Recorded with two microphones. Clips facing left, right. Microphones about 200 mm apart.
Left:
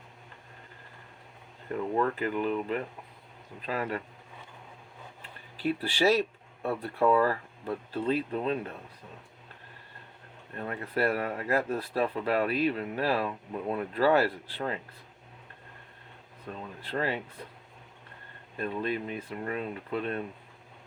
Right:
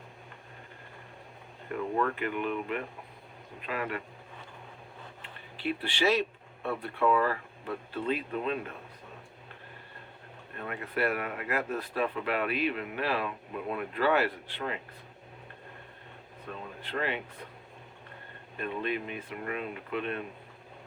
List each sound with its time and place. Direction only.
2.1 s speech: 35° left (ahead or behind)
5.2 s a sound: 40° left (ahead or behind)
6.7 s speech: 40° left (ahead or behind)
10.6 s speech: 35° left (ahead or behind)
16.8 s speech: 35° left (ahead or behind)
18.5 s speech: 35° left (ahead or behind)